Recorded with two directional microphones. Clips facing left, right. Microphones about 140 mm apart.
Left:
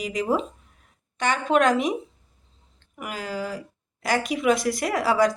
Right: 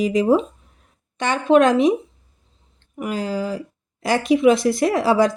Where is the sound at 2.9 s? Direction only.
30° right (ahead or behind).